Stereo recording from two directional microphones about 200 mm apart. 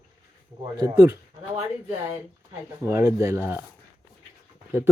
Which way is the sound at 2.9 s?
15° right (ahead or behind).